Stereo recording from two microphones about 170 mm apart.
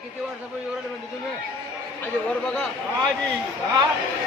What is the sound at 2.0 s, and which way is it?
Speech, 5° left (ahead or behind).